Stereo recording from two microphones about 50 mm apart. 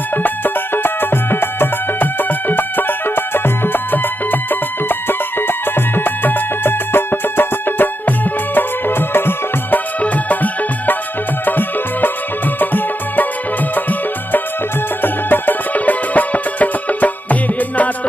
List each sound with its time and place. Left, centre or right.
0.2 s music: left
10.0 s music: left